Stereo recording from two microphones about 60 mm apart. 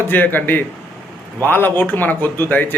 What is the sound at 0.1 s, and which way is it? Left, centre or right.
Speech, left.